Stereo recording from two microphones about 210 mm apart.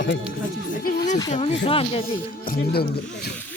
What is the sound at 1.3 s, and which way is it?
Speech, 30° left (ahead or behind).